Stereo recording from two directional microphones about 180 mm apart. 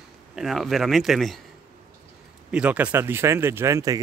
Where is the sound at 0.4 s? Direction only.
Centre (ahead or behind).